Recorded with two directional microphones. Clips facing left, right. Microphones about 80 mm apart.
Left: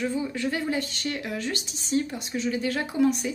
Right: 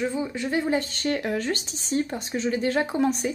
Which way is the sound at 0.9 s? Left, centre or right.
Right.